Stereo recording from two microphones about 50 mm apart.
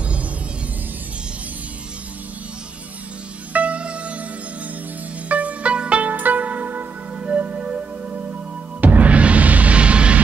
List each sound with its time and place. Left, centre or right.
3.5 s music: right
5.3 s music: right